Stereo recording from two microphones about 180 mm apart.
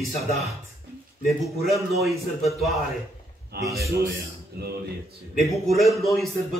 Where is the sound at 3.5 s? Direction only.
65° right (ahead or behind).